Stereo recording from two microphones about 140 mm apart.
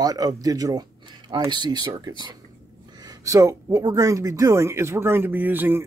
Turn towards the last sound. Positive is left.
turn(degrees=-15)  # may be behind; listen again after turning